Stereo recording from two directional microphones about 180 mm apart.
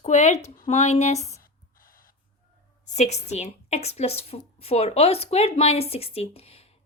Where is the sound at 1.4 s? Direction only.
55° left (ahead or behind).